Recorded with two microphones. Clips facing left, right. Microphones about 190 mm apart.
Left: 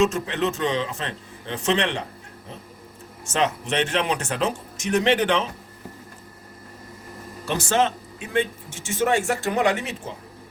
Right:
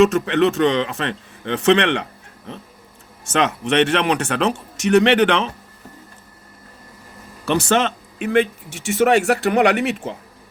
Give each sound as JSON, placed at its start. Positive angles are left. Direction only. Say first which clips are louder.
{"t": 0.0, "sound": "speech", "louder": "right 7 dB", "side_deg": -70}
{"t": 3.3, "sound": "speech", "louder": "right 5 dB", "side_deg": -70}
{"t": 7.4, "sound": "speech", "louder": "right 4 dB", "side_deg": -70}